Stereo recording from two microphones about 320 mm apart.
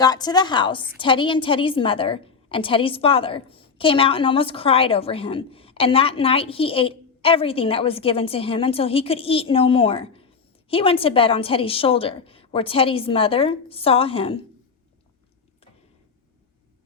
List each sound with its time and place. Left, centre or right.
0.0 s a woman's voice: centre